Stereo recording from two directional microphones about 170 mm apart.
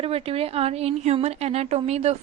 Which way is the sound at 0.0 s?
35° right (ahead or behind).